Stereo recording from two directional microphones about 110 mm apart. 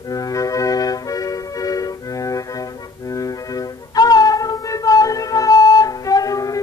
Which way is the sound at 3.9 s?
35° left (ahead or behind).